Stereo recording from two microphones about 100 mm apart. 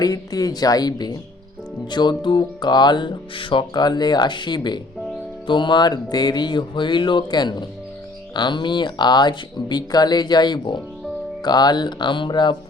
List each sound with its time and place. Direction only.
0.0 s speech: 40° left (ahead or behind)
1.9 s music: 50° left (ahead or behind)